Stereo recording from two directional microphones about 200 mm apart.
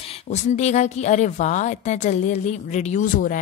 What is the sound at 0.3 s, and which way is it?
A woman's voice, 35° left (ahead or behind).